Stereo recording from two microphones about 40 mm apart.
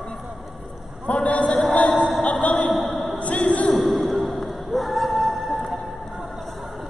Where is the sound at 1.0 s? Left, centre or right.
Left.